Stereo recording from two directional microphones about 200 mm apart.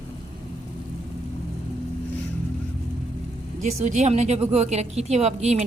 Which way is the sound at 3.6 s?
35° right (ahead or behind).